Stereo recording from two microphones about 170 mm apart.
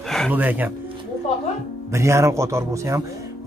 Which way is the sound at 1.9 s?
15° right (ahead or behind).